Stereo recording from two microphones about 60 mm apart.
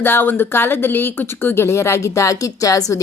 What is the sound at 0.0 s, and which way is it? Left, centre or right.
Speech, left.